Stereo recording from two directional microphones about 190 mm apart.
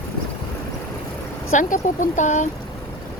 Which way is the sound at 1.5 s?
40° left (ahead or behind).